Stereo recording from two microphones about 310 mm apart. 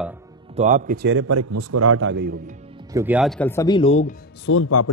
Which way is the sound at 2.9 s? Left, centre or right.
Centre.